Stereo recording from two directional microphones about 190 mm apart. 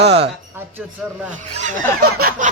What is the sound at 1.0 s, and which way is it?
Speech, 5° right (ahead or behind).